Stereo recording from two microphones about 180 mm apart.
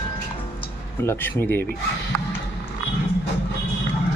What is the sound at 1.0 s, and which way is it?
Speech, 10° left (ahead or behind).